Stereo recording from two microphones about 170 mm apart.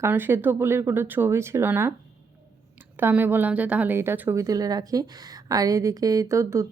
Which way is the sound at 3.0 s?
10° right (ahead or behind).